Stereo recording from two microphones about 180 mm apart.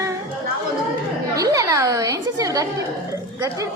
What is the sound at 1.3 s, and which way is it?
A woman's voice, 20° right (ahead or behind).